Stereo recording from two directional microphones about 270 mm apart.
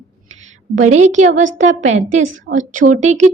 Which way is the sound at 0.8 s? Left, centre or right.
Right.